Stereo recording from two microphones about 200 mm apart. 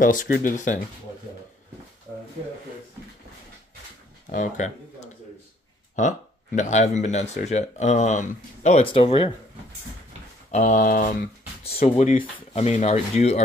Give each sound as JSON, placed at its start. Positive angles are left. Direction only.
{"t": 0.0, "sound": "speech", "side_deg": 40}
{"t": 4.3, "sound": "a sound", "side_deg": 40}
{"t": 5.9, "sound": "speech", "side_deg": 40}
{"t": 10.5, "sound": "speech", "side_deg": 40}
{"t": 11.6, "sound": "speech", "side_deg": 30}